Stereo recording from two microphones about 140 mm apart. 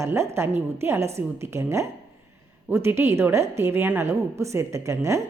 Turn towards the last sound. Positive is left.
turn(degrees=-20)  # may be behind; listen again after turning